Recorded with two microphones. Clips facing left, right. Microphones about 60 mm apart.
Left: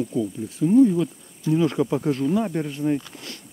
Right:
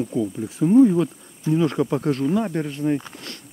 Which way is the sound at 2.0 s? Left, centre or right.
Centre.